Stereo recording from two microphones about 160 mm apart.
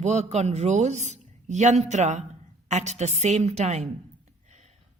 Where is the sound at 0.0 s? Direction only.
45° right (ahead or behind).